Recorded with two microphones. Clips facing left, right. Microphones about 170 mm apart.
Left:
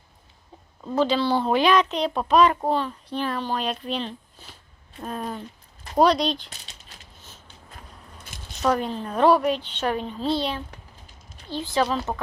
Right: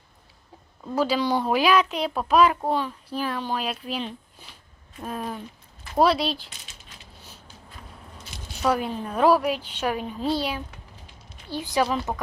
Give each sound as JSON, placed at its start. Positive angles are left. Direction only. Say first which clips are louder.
{"t": 0.9, "sound": "a woman's voice", "louder": "left 2 dB", "side_deg": -10}
{"t": 6.5, "sound": "a sound", "louder": "left 1 dB", "side_deg": 40}
{"t": 8.6, "sound": "a woman's voice", "louder": "left 1 dB", "side_deg": -5}